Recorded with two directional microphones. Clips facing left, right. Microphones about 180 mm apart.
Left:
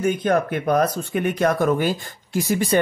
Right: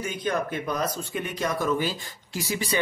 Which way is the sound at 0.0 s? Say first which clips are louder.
Left 8 dB; 55° left (ahead or behind).